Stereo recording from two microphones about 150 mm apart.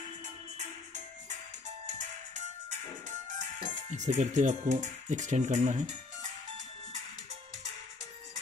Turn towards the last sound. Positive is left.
turn(degrees=-50)  # may be behind; listen again after turning